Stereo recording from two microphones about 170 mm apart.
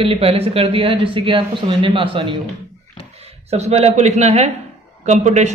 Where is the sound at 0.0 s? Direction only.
35° right (ahead or behind).